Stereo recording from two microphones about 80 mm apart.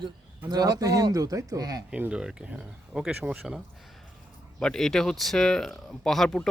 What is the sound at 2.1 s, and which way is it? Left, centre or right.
Speech, centre.